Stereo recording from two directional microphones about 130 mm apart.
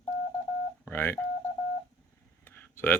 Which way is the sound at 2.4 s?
15° left (ahead or behind).